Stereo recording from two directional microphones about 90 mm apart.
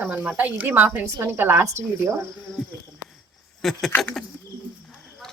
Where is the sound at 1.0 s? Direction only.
30° right (ahead or behind).